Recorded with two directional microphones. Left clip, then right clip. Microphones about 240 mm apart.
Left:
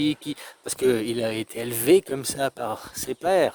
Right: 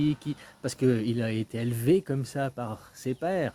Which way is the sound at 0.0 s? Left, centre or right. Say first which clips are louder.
Left 4 dB; left.